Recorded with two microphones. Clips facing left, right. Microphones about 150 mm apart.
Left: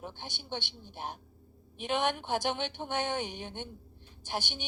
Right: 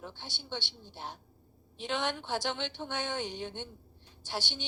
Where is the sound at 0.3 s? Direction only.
15° left (ahead or behind).